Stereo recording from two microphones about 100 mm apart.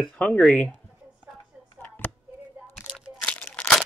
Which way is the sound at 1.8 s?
20° left (ahead or behind).